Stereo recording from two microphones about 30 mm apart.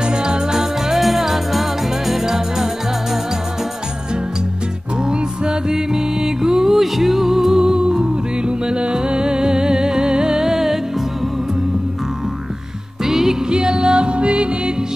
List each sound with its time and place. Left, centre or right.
0.0 s music: right
0.6 s music: centre
5.0 s music: right
13.0 s music: centre
13.5 s music: right